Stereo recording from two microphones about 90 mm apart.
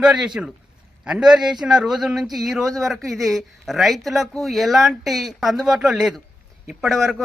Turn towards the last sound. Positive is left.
turn(degrees=0)  # may be behind; listen again after turning